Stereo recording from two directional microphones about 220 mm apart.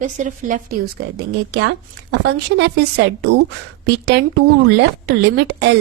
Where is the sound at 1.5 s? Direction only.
55° right (ahead or behind).